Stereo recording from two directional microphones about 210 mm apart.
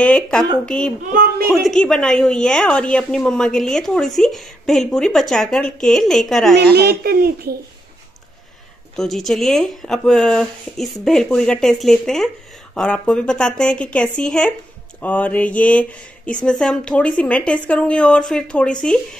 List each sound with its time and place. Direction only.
0.0 s a woman's voice: 5° left (ahead or behind)
1.1 s speech: 40° right (ahead or behind)
1.5 s a woman's voice: centre (ahead or behind)
6.5 s a woman's voice: 50° right (ahead or behind)
8.9 s a woman's voice: centre (ahead or behind)